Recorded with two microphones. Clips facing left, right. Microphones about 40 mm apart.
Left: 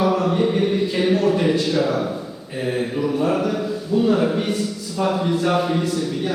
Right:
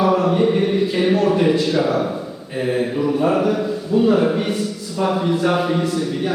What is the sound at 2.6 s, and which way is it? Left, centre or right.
A man's voice, centre.